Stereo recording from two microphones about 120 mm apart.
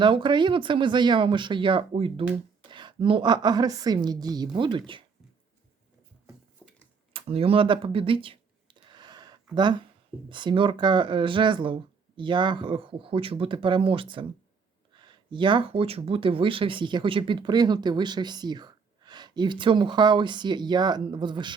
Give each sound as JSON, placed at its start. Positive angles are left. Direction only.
{"t": 0.0, "sound": "speech", "side_deg": -40}
{"t": 6.6, "sound": "tick-tock", "side_deg": -15}
{"t": 7.1, "sound": "a sound", "side_deg": -50}
{"t": 10.2, "sound": "speech", "side_deg": -40}